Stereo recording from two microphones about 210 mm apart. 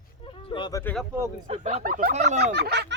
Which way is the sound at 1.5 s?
35° right (ahead or behind).